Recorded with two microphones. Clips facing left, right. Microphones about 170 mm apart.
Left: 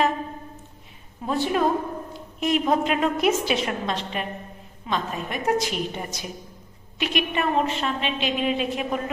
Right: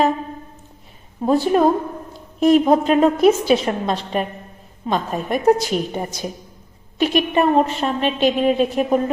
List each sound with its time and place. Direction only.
1.2 s a woman's voice: 40° right (ahead or behind)